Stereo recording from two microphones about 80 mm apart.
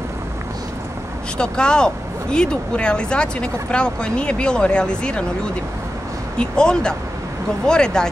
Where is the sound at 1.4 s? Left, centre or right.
Centre.